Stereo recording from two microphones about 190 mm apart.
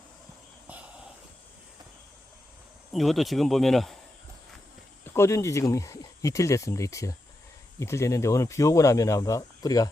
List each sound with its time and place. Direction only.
2.9 s speech: centre (ahead or behind)
5.1 s speech: 15° left (ahead or behind)